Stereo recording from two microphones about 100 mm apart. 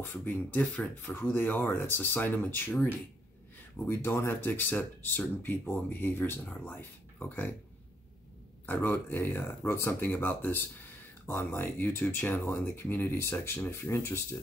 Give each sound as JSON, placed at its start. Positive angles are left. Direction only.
{"t": 0.0, "sound": "speech", "side_deg": 20}
{"t": 3.8, "sound": "speech", "side_deg": 25}
{"t": 8.6, "sound": "speech", "side_deg": 20}